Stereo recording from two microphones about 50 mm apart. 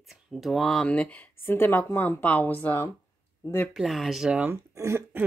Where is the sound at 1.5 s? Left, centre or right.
Left.